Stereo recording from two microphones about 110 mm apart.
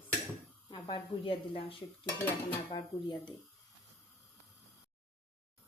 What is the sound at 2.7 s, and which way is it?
Speech, 40° left (ahead or behind).